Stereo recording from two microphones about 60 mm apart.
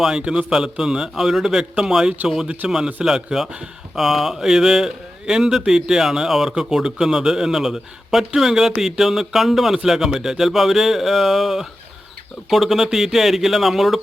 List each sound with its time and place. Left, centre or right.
0.2 s a man's voice: centre